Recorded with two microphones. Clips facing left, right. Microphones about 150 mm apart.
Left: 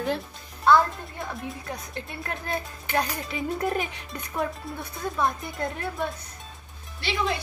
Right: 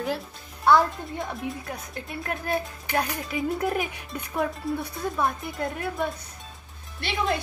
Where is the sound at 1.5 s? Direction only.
5° right (ahead or behind).